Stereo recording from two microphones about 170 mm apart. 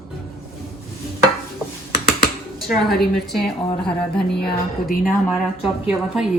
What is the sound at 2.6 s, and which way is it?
A woman's voice, centre (ahead or behind).